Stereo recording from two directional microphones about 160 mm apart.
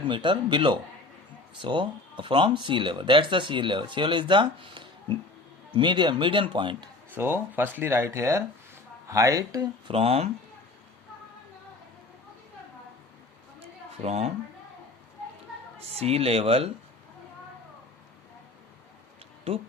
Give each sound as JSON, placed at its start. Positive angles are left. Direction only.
{"t": 0.0, "sound": "a man's voice", "side_deg": -30}
{"t": 7.2, "sound": "a man's voice", "side_deg": -15}
{"t": 9.9, "sound": "speech", "side_deg": -35}
{"t": 13.9, "sound": "speech", "side_deg": -40}
{"t": 15.9, "sound": "speech", "side_deg": -40}
{"t": 19.5, "sound": "speech", "side_deg": -40}